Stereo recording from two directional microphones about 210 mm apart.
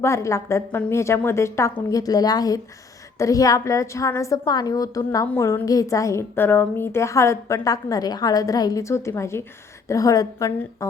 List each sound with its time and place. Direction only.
0.0 s a woman's voice: 15° left (ahead or behind)